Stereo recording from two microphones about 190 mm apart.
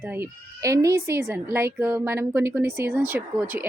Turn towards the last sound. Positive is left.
turn(degrees=-10)  # may be behind; listen again after turning